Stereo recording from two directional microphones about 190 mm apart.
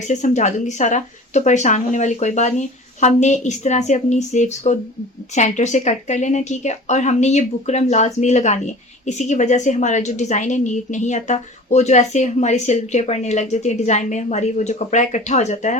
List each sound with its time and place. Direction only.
0.0 s speech: 40° left (ahead or behind)